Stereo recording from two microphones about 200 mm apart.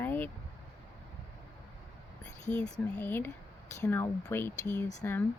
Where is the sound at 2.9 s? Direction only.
10° left (ahead or behind).